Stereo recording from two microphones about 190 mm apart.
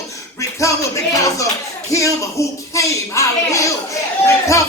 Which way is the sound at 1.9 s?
15° left (ahead or behind).